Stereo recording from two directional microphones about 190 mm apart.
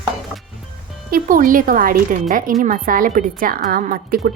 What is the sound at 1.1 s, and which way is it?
Speech, 50° right (ahead or behind).